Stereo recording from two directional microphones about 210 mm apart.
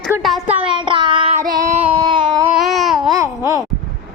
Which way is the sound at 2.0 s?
20° right (ahead or behind).